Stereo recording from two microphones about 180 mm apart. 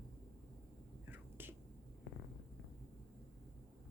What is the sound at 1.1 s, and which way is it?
Whispering, 10° right (ahead or behind).